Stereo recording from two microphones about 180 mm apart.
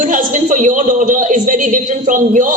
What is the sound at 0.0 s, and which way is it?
A woman's voice, 45° right (ahead or behind).